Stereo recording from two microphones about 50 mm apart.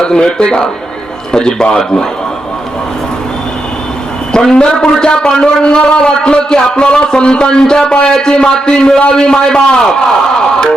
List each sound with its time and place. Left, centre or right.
0.0 s a man's voice: centre
4.3 s a man's voice: centre